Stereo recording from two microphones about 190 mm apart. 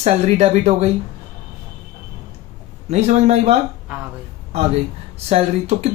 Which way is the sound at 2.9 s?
35° right (ahead or behind).